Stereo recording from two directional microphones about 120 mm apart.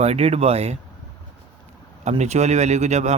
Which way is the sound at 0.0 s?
60° right (ahead or behind).